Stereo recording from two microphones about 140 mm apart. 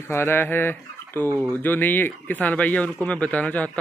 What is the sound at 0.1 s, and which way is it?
Speech, 15° left (ahead or behind).